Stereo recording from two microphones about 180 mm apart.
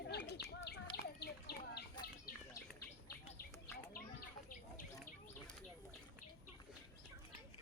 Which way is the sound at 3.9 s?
50° left (ahead or behind).